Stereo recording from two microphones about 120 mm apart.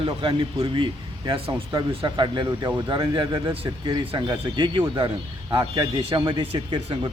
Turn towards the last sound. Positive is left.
turn(degrees=-45)  # may be behind; listen again after turning